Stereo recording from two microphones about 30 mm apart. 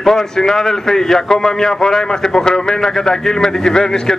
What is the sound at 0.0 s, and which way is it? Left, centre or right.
A man's voice, centre.